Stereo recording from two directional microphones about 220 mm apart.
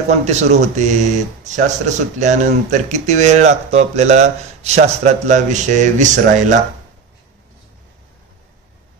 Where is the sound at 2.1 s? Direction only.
35° right (ahead or behind).